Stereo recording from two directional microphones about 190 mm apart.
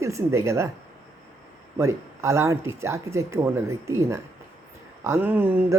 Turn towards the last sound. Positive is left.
turn(degrees=-10)  # may be behind; listen again after turning